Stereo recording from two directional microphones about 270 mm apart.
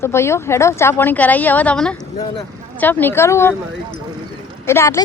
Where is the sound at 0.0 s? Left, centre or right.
Centre.